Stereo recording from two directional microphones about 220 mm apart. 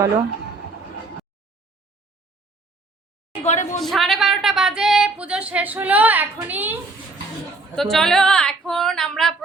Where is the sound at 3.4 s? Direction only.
30° left (ahead or behind).